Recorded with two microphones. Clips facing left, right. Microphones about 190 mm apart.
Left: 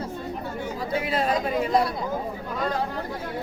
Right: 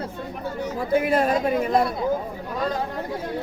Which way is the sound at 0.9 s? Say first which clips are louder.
Right 5 dB; 50° right (ahead or behind).